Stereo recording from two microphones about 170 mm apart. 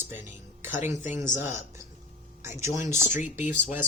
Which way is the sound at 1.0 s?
45° left (ahead or behind).